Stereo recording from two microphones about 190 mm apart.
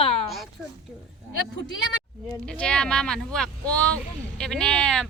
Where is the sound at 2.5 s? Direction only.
5° left (ahead or behind).